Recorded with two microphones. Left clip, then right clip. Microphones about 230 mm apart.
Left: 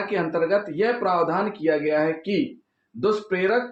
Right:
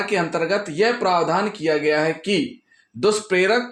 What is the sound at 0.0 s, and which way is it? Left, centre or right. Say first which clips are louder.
Speech: right 2 dB; right.